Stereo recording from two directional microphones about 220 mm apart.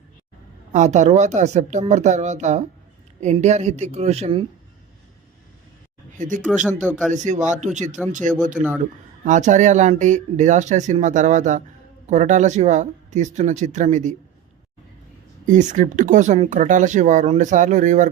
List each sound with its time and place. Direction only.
0.7 s speech: 30° right (ahead or behind)
6.1 s speech: 35° right (ahead or behind)
6.4 s speech: 5° right (ahead or behind)
7.1 s speech: 35° right (ahead or behind)
15.4 s speech: 35° right (ahead or behind)